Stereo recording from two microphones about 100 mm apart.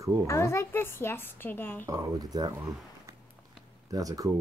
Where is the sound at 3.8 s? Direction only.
35° right (ahead or behind).